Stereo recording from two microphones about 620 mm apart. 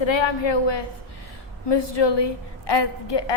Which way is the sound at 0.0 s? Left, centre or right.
Left.